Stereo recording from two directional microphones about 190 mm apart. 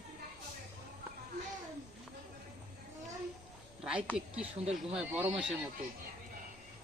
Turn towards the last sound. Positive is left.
turn(degrees=-5)  # may be behind; listen again after turning